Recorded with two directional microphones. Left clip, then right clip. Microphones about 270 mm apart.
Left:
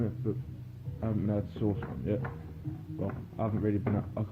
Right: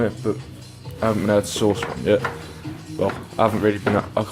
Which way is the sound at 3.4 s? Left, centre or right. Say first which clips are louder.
Right 17 dB; centre.